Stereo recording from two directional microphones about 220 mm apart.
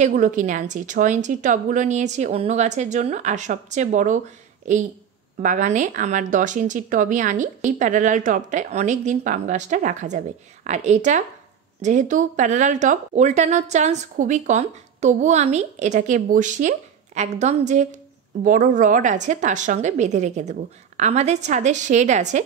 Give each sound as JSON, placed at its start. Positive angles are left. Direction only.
{"t": 0.0, "sound": "speech", "side_deg": -35}
{"t": 5.4, "sound": "speech", "side_deg": -35}